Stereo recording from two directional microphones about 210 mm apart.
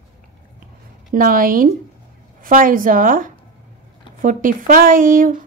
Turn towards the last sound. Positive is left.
turn(degrees=-40)  # may be behind; listen again after turning